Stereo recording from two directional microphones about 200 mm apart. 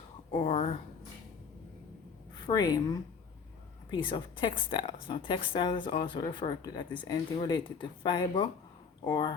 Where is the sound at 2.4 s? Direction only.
20° left (ahead or behind).